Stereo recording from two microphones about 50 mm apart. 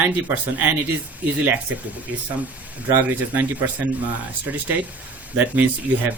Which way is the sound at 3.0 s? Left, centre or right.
Right.